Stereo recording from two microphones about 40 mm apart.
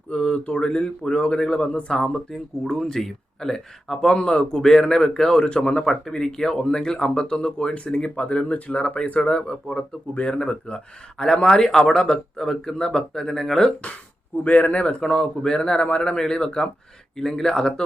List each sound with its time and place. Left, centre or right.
0.1 s speech: left
2.0 s speech: centre
4.1 s speech: left
5.8 s speech: centre; by 9.3 s left
9.3 s speech: left
14.4 s speech: left
15.0 s speech: centre